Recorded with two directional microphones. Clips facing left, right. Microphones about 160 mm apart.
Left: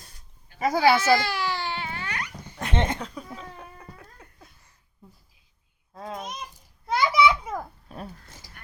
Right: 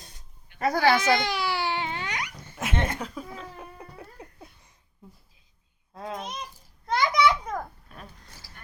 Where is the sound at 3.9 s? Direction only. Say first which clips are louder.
Right 5 dB; 20° right (ahead or behind).